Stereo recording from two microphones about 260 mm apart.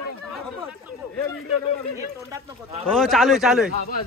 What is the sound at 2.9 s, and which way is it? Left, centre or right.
Speech, centre.